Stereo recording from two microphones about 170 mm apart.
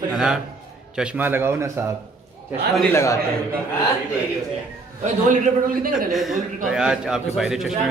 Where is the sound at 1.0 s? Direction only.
10° right (ahead or behind).